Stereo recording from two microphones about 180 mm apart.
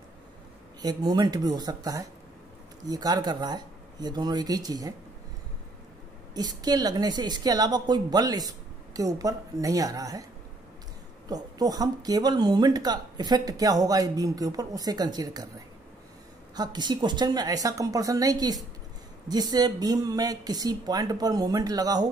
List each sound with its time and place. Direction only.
0.8 s speech: 20° right (ahead or behind)
6.3 s speech: 20° right (ahead or behind)
11.2 s speech: 20° right (ahead or behind)
16.5 s speech: 25° right (ahead or behind)